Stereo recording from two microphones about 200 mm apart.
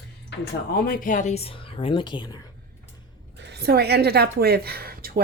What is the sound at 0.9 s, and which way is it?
A woman's voice, 45° left (ahead or behind).